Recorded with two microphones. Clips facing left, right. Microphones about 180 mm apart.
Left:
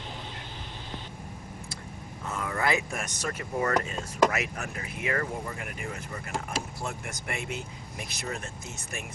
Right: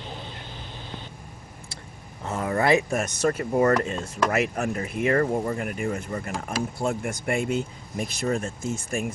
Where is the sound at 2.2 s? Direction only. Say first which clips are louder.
Right 7 dB; 35° right (ahead or behind).